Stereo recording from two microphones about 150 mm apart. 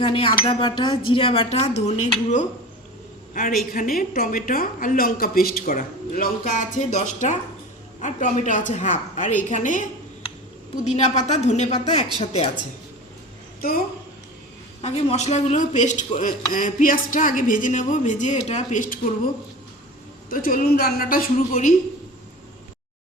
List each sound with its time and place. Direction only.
0.0 s speech: 35° left (ahead or behind)
3.3 s speech: 65° left (ahead or behind)
10.8 s a woman's voice: 50° left (ahead or behind)
13.6 s a woman's voice: 80° left
14.8 s speech: 45° left (ahead or behind); by 19.3 s 65° left (ahead or behind)
20.3 s speech: 70° left (ahead or behind)